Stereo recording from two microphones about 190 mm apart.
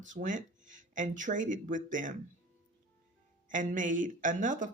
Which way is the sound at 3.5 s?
40° right (ahead or behind).